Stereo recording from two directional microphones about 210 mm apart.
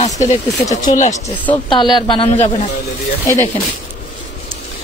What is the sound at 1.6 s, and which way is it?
Speech, 20° left (ahead or behind).